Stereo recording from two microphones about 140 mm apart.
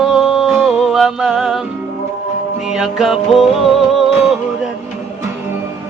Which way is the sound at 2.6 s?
5° right (ahead or behind).